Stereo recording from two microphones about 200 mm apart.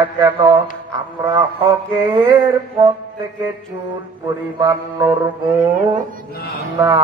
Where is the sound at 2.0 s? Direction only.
20° right (ahead or behind).